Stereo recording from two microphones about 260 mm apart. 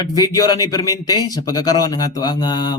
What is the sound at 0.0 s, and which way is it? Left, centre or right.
Speech, centre.